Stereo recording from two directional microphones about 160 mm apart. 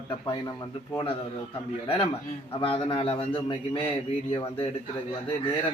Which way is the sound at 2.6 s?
35° left (ahead or behind).